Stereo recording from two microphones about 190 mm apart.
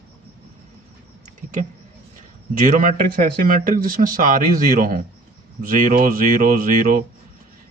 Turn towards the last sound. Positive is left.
turn(degrees=-45)  # may be behind; listen again after turning